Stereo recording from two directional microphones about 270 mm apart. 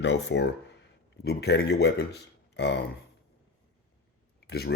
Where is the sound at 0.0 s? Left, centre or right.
Left.